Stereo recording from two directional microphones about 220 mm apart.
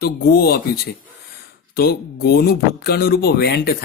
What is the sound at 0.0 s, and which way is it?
Speech, 45° left (ahead or behind).